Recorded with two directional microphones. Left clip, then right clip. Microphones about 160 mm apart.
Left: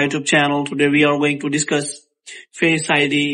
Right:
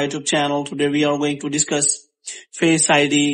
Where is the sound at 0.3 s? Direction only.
20° right (ahead or behind).